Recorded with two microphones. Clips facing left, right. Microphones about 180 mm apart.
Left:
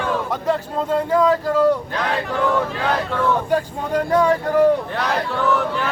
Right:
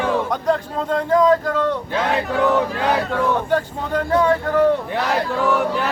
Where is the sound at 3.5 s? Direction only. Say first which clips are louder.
Even; 10° left (ahead or behind).